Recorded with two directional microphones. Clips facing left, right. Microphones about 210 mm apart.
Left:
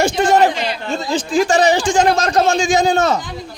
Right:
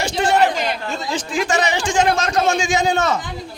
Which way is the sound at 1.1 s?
30° left (ahead or behind).